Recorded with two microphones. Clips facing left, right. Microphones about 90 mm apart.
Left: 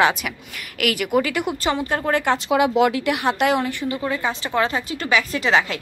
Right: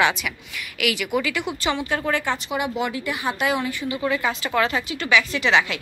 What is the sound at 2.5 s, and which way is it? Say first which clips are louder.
Speech: left 11 dB; 90° left.